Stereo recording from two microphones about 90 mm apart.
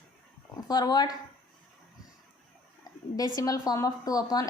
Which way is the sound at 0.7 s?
45° left (ahead or behind).